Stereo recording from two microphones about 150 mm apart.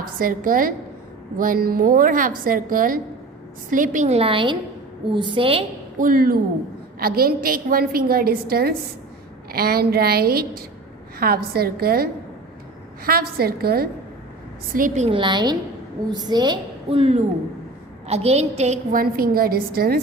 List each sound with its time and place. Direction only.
0.2 s a woman's voice: 70° right (ahead or behind); by 5.6 s 35° right (ahead or behind)
6.0 s a woman's voice: 70° right (ahead or behind); by 12.0 s 90° right
13.1 s a woman's voice: 90° right
14.7 s a woman's voice: 65° right (ahead or behind)
15.0 s a woman's voice: 35° right (ahead or behind)
17.0 s a woman's voice: 45° right (ahead or behind)
18.9 s a woman's voice: 75° right (ahead or behind)